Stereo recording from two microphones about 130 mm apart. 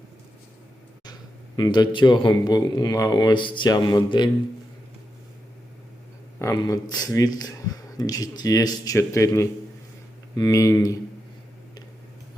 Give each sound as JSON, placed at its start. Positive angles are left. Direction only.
{"t": 1.5, "sound": "a man's voice", "side_deg": 30}
{"t": 6.6, "sound": "speech", "side_deg": 30}